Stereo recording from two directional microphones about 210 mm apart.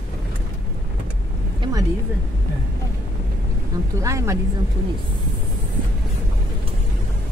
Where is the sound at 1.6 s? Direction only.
15° right (ahead or behind).